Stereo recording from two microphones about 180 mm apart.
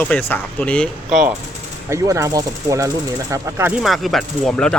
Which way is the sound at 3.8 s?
Centre (ahead or behind).